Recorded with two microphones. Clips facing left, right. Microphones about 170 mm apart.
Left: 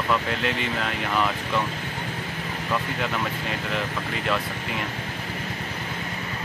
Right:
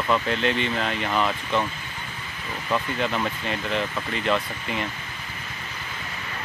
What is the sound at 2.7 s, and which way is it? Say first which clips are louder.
Speech: right 3 dB; centre (ahead or behind).